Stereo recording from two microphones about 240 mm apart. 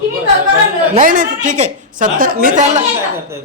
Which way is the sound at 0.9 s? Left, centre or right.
Right.